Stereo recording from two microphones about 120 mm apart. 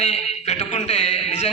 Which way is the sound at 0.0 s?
65° left (ahead or behind).